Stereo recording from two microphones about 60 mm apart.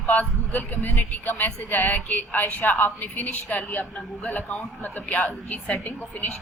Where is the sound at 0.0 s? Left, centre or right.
Left.